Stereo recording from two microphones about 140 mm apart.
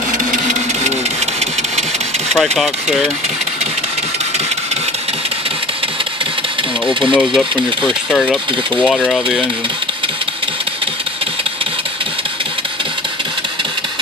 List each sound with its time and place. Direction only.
0.3 s printer: 65° right (ahead or behind)
2.3 s speech: centre (ahead or behind)
6.9 s speech: 35° right (ahead or behind)
7.2 s speech: centre (ahead or behind)